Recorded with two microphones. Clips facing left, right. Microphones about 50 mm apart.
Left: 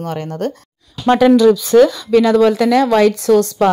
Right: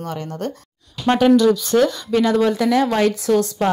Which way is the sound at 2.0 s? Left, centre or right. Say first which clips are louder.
Left 6 dB; left.